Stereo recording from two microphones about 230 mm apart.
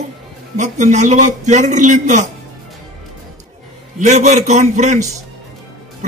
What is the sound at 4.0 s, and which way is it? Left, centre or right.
A man's voice, right.